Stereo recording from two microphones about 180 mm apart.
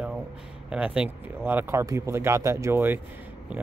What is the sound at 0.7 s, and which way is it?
Speech, 5° right (ahead or behind).